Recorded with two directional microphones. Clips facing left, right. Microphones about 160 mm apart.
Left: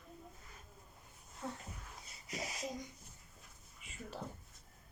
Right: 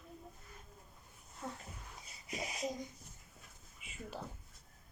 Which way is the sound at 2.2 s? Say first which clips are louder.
Right 1 dB; 20° right (ahead or behind).